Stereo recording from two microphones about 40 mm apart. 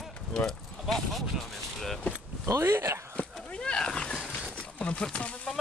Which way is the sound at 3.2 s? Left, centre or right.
Left.